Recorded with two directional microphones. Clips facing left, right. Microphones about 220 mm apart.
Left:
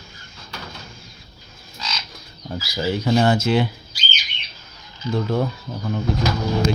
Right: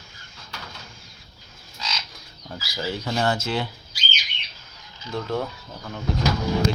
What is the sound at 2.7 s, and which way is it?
Speech, 15° left (ahead or behind).